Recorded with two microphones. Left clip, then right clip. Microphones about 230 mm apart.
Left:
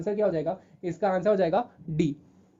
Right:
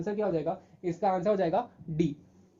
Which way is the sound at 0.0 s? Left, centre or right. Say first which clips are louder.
Left 4 dB; left.